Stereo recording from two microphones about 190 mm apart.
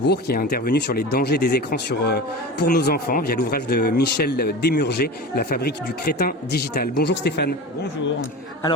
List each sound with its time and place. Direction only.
0.0 s speech: 55° left (ahead or behind)
7.2 s speech: 60° left (ahead or behind)